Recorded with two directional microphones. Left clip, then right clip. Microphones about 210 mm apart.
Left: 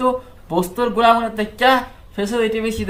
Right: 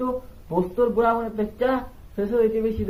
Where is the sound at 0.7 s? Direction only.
15° left (ahead or behind).